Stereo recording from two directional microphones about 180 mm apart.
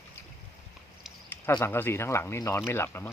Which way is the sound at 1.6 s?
10° left (ahead or behind).